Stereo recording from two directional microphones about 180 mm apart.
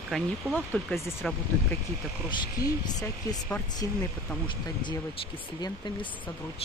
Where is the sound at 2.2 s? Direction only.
20° left (ahead or behind).